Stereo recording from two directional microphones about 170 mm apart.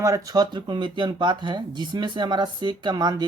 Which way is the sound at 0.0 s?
20° right (ahead or behind).